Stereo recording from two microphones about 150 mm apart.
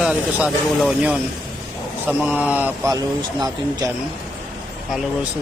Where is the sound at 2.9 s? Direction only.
25° right (ahead or behind).